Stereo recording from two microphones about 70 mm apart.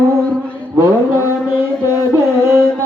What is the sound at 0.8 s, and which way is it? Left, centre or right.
Mantra, right.